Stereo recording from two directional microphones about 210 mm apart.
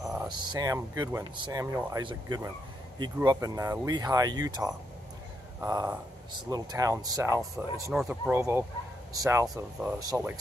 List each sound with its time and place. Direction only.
0.2 s speech: 20° right (ahead or behind)